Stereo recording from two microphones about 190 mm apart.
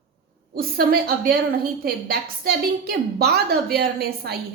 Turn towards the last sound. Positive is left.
turn(degrees=-55)  # may be behind; listen again after turning